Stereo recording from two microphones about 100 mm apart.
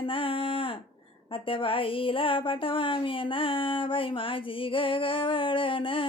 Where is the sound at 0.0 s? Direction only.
60° left (ahead or behind).